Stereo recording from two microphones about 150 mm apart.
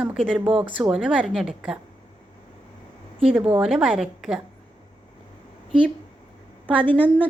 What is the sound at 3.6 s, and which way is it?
Speech, 5° right (ahead or behind).